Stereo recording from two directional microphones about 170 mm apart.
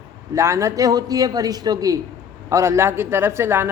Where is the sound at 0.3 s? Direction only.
15° right (ahead or behind).